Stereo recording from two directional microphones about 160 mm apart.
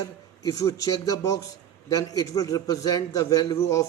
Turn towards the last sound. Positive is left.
turn(degrees=20)  # may be behind; listen again after turning